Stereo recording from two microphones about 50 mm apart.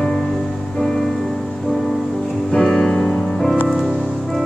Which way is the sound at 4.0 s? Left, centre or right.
Centre.